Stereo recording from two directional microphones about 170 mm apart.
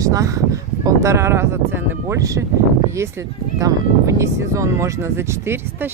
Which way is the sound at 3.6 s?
20° right (ahead or behind).